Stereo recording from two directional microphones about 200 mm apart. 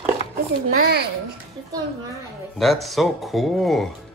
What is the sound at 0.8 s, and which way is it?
Speech, 55° right (ahead or behind).